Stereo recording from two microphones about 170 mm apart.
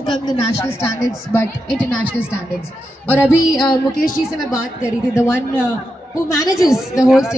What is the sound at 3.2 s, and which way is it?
Speech, 5° right (ahead or behind).